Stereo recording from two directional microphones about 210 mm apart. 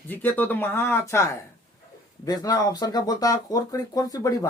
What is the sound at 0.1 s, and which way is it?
A man's voice, 10° left (ahead or behind).